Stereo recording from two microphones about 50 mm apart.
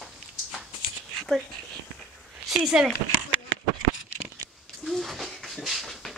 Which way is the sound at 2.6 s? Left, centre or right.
Centre.